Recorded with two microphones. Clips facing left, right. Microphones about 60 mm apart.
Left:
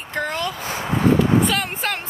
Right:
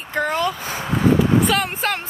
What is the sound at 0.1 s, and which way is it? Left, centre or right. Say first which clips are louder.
A woman's voice: right 4 dB; centre.